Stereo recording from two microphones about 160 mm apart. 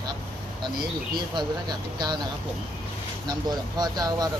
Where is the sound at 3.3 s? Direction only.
25° right (ahead or behind).